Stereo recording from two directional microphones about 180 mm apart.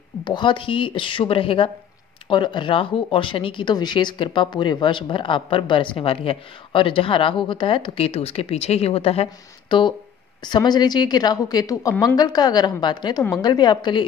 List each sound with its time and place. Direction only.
0.2 s speech: 25° left (ahead or behind)